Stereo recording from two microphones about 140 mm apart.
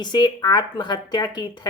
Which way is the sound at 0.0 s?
30° left (ahead or behind).